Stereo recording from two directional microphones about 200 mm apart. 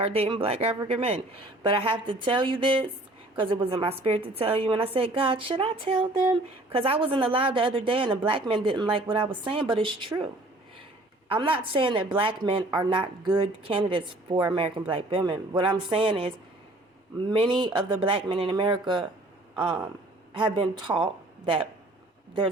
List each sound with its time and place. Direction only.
0.0 s speech: 30° right (ahead or behind)
11.3 s speech: 25° right (ahead or behind)
20.3 s a woman's voice: 25° right (ahead or behind)